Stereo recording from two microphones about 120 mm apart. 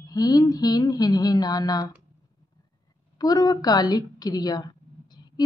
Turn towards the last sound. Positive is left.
turn(degrees=35)  # may be behind; listen again after turning